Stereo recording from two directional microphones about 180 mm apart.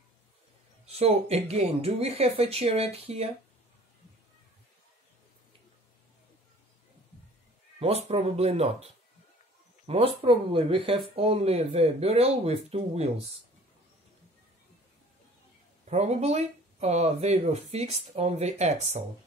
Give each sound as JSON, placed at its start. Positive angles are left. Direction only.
{"t": 0.8, "sound": "speech", "side_deg": -35}
{"t": 8.1, "sound": "speech", "side_deg": -35}
{"t": 15.9, "sound": "speech", "side_deg": -40}